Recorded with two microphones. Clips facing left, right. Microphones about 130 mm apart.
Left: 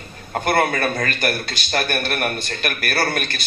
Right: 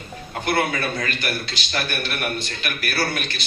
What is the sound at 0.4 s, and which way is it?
A man's voice, 50° left (ahead or behind).